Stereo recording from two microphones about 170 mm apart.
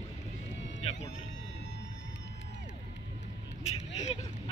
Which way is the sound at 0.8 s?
40° left (ahead or behind).